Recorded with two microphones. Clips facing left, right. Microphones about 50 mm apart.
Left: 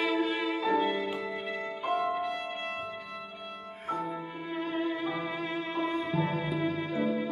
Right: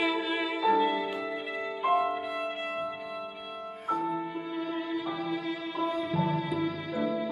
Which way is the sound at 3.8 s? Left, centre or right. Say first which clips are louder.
Right 4 dB; left.